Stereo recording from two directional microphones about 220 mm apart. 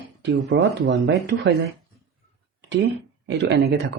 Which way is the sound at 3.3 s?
50° right (ahead or behind).